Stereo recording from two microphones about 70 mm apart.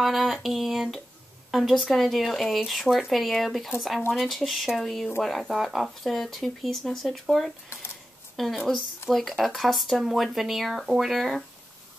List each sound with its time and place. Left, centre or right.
0.0 s speech: centre
9.0 s speech: left
9.4 s speech: centre